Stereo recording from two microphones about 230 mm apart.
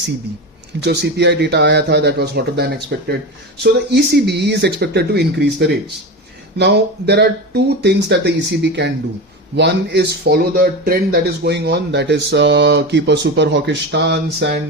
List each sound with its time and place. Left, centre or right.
0.8 s speech: right